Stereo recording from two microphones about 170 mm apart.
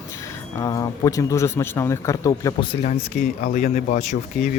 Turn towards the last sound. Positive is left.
turn(degrees=50)  # may be behind; listen again after turning